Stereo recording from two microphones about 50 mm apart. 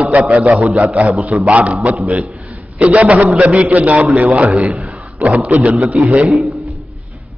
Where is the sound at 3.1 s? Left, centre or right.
Centre.